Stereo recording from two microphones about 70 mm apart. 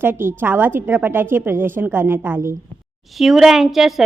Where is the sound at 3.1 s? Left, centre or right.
Centre.